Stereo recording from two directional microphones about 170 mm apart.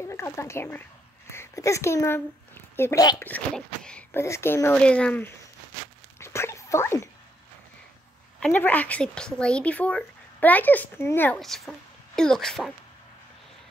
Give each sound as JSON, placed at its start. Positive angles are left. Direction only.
{"t": 0.0, "sound": "a woman's voice", "side_deg": 15}
{"t": 3.3, "sound": "a woman's voice", "side_deg": 5}
{"t": 6.1, "sound": "a sound", "side_deg": 15}
{"t": 8.4, "sound": "a woman's voice", "side_deg": 10}
{"t": 11.3, "sound": "speech", "side_deg": 0}